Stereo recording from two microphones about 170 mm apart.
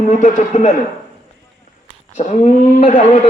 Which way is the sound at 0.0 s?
45° left (ahead or behind).